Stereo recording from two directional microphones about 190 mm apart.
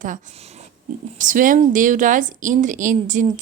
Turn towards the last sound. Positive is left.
turn(degrees=-40)  # may be behind; listen again after turning